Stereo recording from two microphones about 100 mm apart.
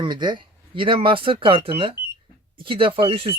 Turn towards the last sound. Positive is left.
turn(degrees=-65)  # may be behind; listen again after turning